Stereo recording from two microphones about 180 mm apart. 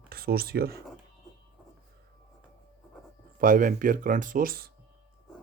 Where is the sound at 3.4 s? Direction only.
50° right (ahead or behind).